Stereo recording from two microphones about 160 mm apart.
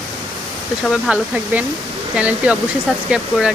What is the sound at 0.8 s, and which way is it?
Speech, centre (ahead or behind).